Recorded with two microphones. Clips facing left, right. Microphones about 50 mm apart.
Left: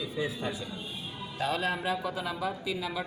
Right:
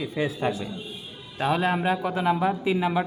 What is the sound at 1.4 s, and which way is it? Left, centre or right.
A man's voice, right.